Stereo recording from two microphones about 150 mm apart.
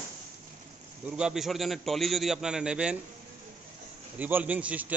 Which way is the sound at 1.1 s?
5° right (ahead or behind).